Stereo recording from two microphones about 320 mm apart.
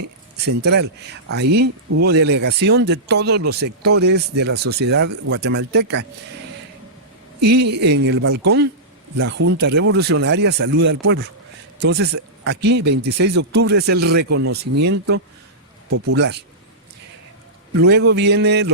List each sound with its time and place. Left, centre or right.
0.4 s speech: right
1.6 s speech: right
2.0 s speech: right
7.4 s speech: right
16.1 s speech: right
17.7 s speech: right